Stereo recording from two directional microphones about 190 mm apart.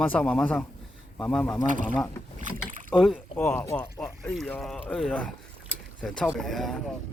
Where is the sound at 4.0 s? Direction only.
Centre (ahead or behind).